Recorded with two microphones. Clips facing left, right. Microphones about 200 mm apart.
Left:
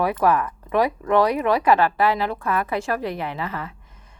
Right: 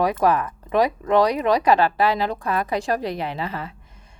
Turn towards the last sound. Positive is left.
turn(degrees=-30)  # may be behind; listen again after turning